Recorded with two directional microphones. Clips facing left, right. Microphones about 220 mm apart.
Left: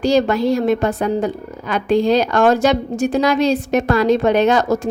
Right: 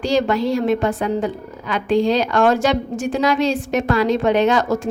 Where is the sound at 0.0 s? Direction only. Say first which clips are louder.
Left 3 dB; 40° left (ahead or behind).